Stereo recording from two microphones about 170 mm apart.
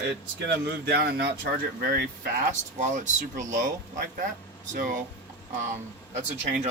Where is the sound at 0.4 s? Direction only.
80° right.